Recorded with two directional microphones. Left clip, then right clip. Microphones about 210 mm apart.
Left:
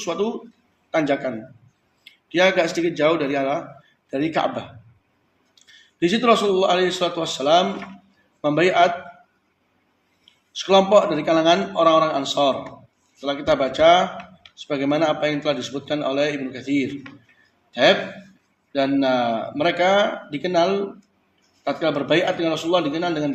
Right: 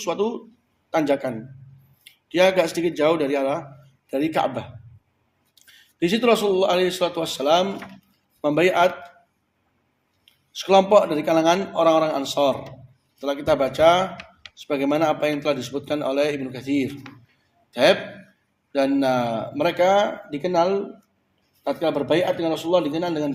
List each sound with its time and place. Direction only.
0.0 s speech: 45° right (ahead or behind)
5.6 s speech: 45° right (ahead or behind)
10.5 s speech: 45° right (ahead or behind)